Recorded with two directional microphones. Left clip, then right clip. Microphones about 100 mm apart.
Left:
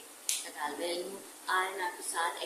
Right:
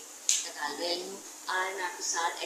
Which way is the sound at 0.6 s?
15° left (ahead or behind).